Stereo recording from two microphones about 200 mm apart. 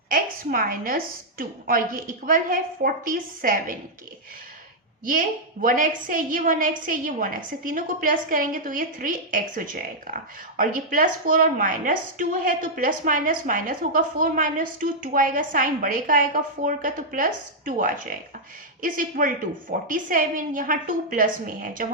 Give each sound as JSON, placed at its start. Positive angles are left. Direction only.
{"t": 0.1, "sound": "a woman's voice", "side_deg": -45}
{"t": 5.0, "sound": "a woman's voice", "side_deg": -45}